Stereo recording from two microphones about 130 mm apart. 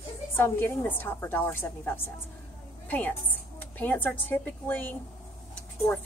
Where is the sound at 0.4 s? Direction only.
15° left (ahead or behind).